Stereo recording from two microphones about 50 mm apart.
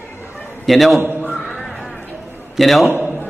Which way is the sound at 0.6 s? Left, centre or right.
Centre.